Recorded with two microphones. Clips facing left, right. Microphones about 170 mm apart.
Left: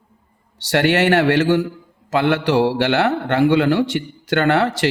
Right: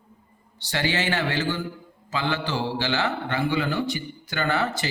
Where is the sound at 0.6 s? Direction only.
70° left (ahead or behind).